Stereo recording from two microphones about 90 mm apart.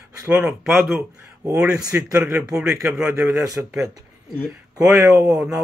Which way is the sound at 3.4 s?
40° right (ahead or behind).